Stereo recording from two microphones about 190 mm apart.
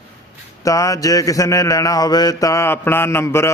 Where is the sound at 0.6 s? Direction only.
15° left (ahead or behind).